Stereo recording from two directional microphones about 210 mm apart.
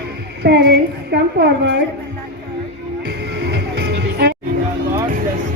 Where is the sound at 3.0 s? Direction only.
50° right (ahead or behind).